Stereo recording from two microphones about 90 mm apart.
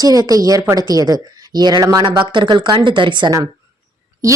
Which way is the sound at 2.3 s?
60° right (ahead or behind).